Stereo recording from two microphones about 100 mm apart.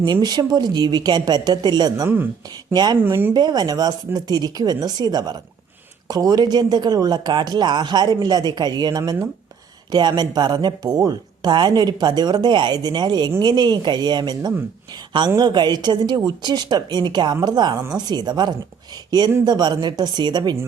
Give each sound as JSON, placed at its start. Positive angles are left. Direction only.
{"t": 0.0, "sound": "speech", "side_deg": -45}
{"t": 3.0, "sound": "speech", "side_deg": -20}
{"t": 3.3, "sound": "speech", "side_deg": -40}